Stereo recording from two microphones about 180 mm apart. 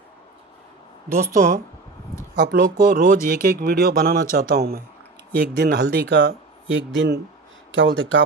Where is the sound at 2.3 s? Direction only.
55° right (ahead or behind).